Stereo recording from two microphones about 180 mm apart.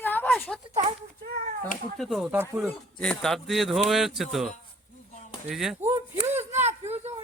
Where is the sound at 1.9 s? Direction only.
Centre (ahead or behind).